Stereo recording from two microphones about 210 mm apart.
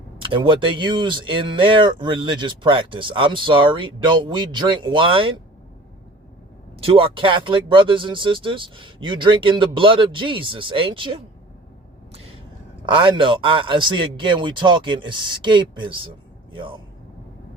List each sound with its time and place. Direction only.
0.2 s speech: 25° right (ahead or behind)
6.7 s speech: 25° right (ahead or behind)
12.8 s speech: 25° right (ahead or behind)